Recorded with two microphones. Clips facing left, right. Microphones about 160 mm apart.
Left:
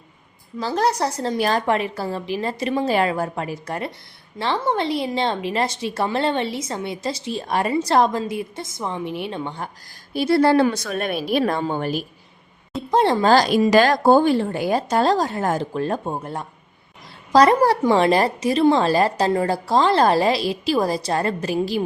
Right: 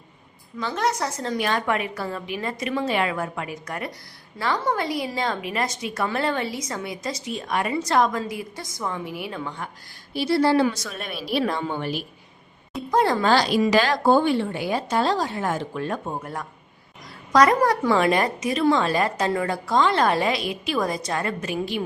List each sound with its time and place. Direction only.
0.6 s a woman's voice: 35° left (ahead or behind)
10.1 s a woman's voice: 50° left (ahead or behind)
12.9 s speech: 25° left (ahead or behind)
13.3 s a woman's voice: 45° left (ahead or behind)